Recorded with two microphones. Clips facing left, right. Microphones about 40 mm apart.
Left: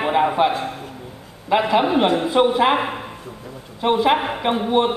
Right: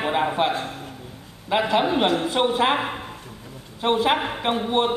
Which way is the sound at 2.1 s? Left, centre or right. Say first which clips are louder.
Left 3 dB; left.